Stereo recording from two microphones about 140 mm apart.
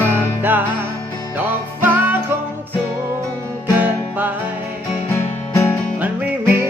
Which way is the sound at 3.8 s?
15° right (ahead or behind).